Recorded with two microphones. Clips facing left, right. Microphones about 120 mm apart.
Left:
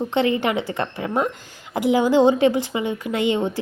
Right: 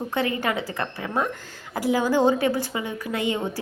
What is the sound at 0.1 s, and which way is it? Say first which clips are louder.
Speech: left 4 dB; 25° left (ahead or behind).